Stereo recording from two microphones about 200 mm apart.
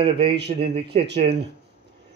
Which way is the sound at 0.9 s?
30° right (ahead or behind).